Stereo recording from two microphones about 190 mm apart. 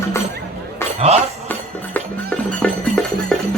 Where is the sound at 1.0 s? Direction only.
35° right (ahead or behind).